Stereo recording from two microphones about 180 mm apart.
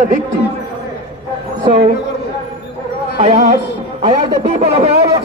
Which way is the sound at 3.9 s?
30° right (ahead or behind).